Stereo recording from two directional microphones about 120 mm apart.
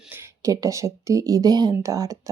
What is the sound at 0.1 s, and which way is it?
Speech, 25° right (ahead or behind).